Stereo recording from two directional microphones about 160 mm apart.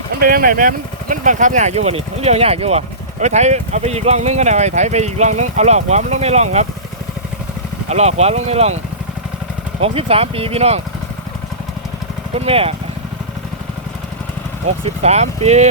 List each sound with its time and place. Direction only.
0.2 s speech: 65° right (ahead or behind); by 6.7 s 45° right (ahead or behind)
7.9 s speech: 45° right (ahead or behind)
9.8 s speech: 35° right (ahead or behind)
12.3 s speech: 35° right (ahead or behind)
14.8 s speech: 45° right (ahead or behind)